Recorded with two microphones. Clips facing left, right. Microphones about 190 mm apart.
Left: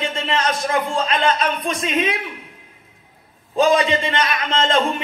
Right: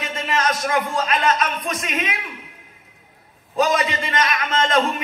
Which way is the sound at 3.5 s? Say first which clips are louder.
Left 4 dB; 30° left (ahead or behind).